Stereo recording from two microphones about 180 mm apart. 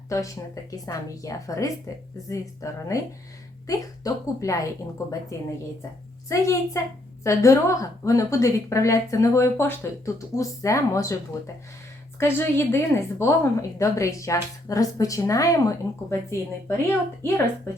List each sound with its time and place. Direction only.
0.1 s a woman's voice: 20° left (ahead or behind)
12.2 s a woman's voice: 15° left (ahead or behind)